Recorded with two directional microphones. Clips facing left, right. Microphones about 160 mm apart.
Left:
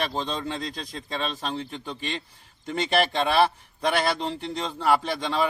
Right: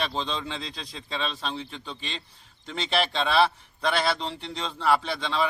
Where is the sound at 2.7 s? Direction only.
50° left (ahead or behind).